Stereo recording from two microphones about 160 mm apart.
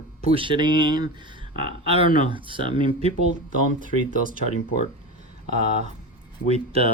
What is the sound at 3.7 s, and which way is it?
Speech, 55° right (ahead or behind).